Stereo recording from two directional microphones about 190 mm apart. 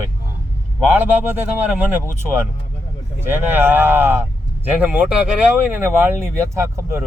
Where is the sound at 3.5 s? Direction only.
10° right (ahead or behind).